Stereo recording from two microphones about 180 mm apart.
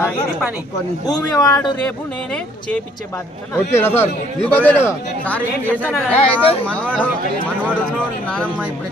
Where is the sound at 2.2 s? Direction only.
5° left (ahead or behind).